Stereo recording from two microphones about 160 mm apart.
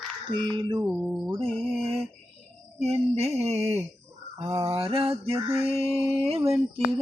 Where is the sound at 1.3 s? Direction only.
35° right (ahead or behind).